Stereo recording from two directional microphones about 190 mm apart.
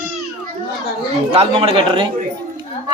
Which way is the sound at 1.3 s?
30° right (ahead or behind).